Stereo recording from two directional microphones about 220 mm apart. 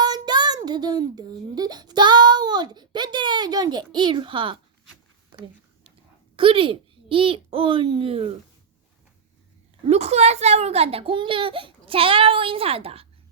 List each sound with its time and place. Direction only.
0.0 s a sound: 20° right (ahead or behind)
6.3 s a child's voice: 25° right (ahead or behind)
9.8 s a child's voice: 30° right (ahead or behind)